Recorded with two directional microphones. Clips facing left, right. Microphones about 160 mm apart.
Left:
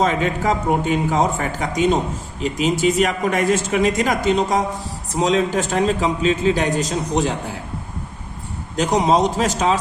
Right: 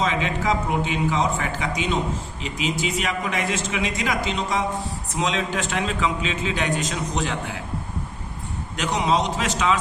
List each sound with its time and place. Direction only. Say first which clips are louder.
0.0 s a man's voice: left 5 dB; 45° left (ahead or behind)
8.7 s a man's voice: left 6 dB; 40° left (ahead or behind)